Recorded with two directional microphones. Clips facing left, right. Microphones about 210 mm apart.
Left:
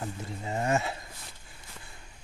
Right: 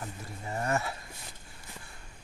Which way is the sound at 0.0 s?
20° left (ahead or behind).